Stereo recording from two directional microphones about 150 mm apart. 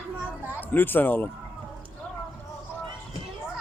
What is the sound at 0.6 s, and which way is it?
Speech, 10° left (ahead or behind).